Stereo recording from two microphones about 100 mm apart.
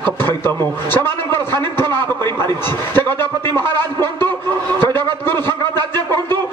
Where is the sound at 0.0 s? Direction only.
20° left (ahead or behind).